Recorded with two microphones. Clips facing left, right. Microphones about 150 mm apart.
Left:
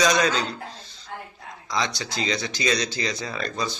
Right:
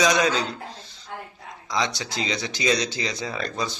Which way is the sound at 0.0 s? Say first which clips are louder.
Even; 10° right (ahead or behind).